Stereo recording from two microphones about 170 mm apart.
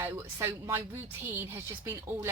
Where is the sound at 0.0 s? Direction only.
15° right (ahead or behind).